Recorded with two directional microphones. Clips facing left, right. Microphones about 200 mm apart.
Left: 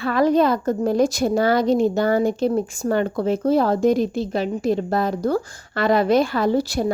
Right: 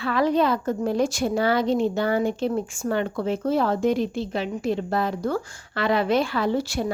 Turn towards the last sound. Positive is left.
turn(degrees=40)  # may be behind; listen again after turning